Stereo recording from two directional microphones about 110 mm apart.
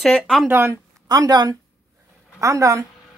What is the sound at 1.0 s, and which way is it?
Speech, 35° right (ahead or behind).